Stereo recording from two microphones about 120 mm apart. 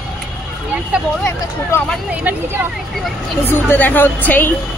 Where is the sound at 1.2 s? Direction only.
15° left (ahead or behind).